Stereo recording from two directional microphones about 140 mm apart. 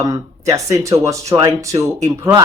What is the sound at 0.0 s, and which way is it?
Speech, 25° right (ahead or behind).